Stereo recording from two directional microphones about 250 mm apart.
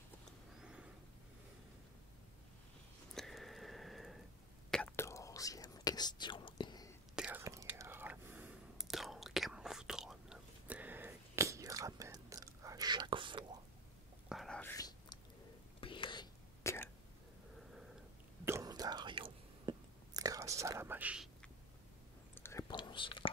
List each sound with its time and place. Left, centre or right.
0.6 s a sound: centre
3.2 s a sound: centre
4.6 s whispering: centre
7.2 s whispering: centre
14.3 s whispering: centre
14.8 s whispering: centre
18.4 s whispering: centre
22.3 s whispering: centre